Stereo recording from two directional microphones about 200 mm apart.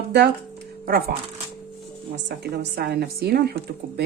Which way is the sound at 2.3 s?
55° right (ahead or behind).